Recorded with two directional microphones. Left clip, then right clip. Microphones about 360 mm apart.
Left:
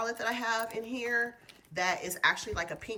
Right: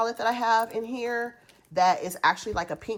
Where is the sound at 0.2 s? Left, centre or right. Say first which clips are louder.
Right 8 dB; centre.